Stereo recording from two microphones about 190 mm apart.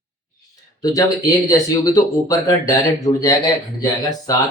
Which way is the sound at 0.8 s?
20° left (ahead or behind).